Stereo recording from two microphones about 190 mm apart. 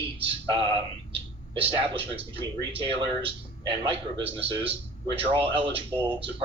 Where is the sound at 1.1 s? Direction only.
25° right (ahead or behind).